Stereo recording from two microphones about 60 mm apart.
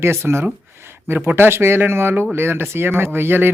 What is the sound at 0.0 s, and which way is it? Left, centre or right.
Speech, right.